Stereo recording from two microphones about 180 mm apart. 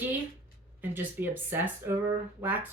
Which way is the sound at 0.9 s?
10° right (ahead or behind).